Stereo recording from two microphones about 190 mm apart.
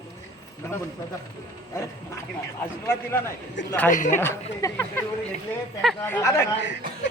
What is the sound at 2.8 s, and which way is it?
A man's voice, 15° left (ahead or behind).